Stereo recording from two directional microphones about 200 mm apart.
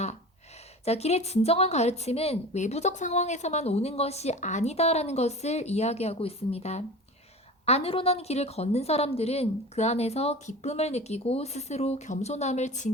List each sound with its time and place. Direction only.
0.9 s a woman's voice: 30° left (ahead or behind)